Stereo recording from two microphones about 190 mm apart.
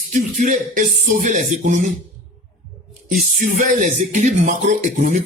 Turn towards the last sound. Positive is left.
turn(degrees=-40)  # may be behind; listen again after turning